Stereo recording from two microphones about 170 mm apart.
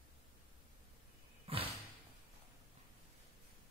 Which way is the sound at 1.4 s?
35° right (ahead or behind).